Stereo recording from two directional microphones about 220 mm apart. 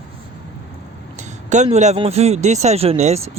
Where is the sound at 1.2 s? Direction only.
35° right (ahead or behind).